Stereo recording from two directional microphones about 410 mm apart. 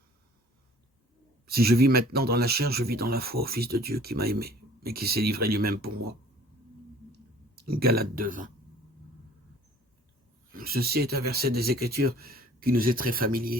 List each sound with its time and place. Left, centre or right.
1.5 s speech: right
7.1 s a sound: right
10.5 s speech: right